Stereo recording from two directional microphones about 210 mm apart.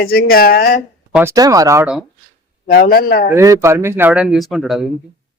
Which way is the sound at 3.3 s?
15° right (ahead or behind).